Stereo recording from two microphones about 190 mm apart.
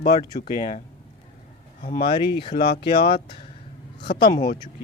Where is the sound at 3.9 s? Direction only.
60° left (ahead or behind).